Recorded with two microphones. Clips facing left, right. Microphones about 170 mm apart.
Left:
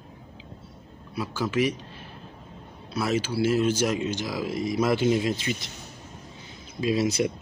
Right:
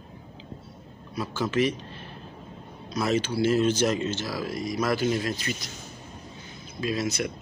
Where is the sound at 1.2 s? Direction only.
10° left (ahead or behind).